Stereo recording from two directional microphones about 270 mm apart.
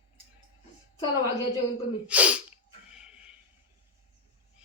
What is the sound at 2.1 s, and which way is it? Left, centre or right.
Speech, centre.